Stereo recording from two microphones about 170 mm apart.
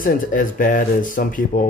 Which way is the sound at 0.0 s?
50° left (ahead or behind).